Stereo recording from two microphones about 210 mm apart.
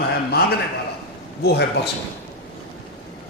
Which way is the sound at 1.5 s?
50° left (ahead or behind).